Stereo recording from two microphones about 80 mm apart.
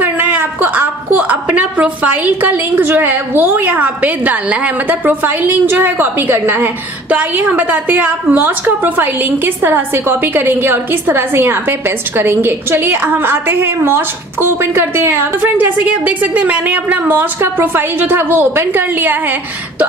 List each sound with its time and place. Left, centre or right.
0.0 s a woman's voice: right
15.8 s a woman's voice: centre